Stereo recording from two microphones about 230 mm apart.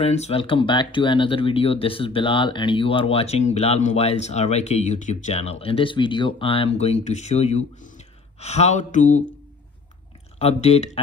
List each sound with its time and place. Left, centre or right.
0.0 s speech: left
10.4 s speech: left